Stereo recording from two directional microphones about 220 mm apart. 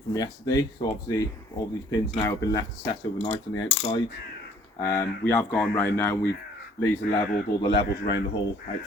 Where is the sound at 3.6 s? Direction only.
20° left (ahead or behind).